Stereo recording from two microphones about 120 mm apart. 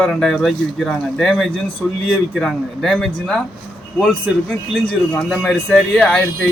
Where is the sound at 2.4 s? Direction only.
5° left (ahead or behind).